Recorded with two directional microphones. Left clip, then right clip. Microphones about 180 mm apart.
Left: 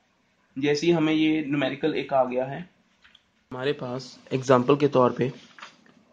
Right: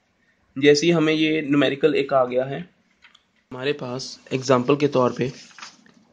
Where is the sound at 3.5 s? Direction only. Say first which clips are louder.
Right 2 dB; 10° right (ahead or behind).